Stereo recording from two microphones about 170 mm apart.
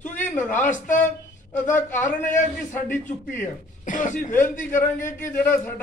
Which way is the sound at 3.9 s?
50° left (ahead or behind).